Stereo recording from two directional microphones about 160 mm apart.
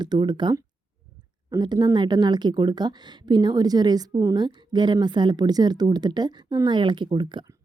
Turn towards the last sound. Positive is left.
turn(degrees=-30)  # may be behind; listen again after turning